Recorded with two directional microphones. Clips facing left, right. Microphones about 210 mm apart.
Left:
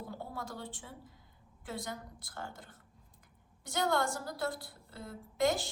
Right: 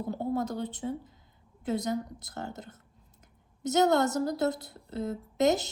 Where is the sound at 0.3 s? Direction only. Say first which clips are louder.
Right 11 dB; 20° right (ahead or behind).